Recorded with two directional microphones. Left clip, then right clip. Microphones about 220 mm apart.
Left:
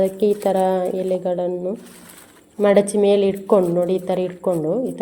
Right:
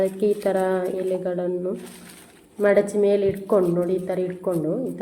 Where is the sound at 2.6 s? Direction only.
25° left (ahead or behind).